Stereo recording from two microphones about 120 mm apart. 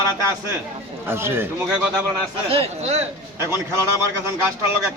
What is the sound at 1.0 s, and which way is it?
Speech, 20° right (ahead or behind).